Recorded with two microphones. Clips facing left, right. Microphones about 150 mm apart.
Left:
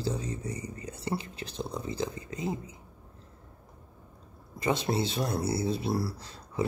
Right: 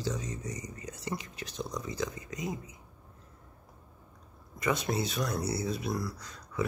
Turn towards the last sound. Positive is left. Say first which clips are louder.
# left 2 dB
turn(degrees=30)  # may be behind; listen again after turning